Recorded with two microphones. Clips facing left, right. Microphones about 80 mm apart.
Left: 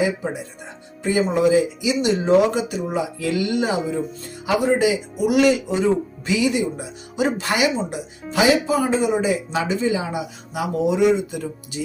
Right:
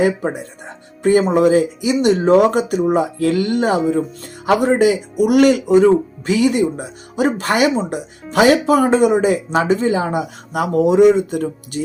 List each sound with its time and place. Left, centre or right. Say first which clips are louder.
1.0 s speech: right 5 dB; right